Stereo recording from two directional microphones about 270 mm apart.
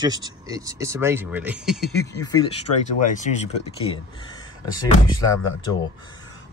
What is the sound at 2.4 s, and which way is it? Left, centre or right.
Speech, left.